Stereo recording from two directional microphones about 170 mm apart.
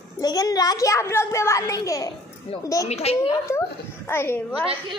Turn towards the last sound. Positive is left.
turn(degrees=15)  # may be behind; listen again after turning